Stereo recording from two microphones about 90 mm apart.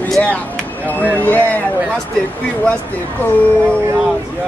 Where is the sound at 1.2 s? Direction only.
20° left (ahead or behind).